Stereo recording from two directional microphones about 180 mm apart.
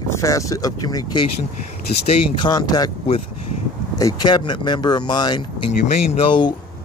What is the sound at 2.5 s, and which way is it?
Speech, 20° left (ahead or behind).